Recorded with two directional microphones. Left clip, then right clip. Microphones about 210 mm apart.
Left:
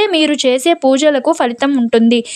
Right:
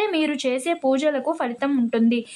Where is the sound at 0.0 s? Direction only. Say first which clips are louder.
Left 10 dB; 35° left (ahead or behind).